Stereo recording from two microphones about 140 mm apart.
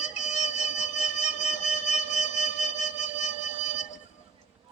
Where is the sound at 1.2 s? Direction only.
55° left (ahead or behind).